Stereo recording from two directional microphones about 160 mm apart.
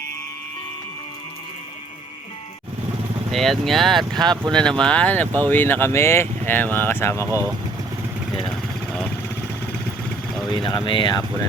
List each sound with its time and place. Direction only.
3.3 s speech: centre (ahead or behind)
4.2 s speech: 25° right (ahead or behind)
4.8 s speech: 5° left (ahead or behind)
7.3 s speech: 15° right (ahead or behind)
10.5 s speech: 30° left (ahead or behind)